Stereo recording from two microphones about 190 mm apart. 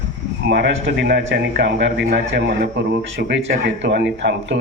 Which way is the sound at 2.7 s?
75° right (ahead or behind).